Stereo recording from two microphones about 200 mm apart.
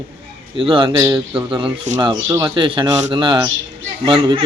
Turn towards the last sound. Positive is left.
turn(degrees=-25)  # may be behind; listen again after turning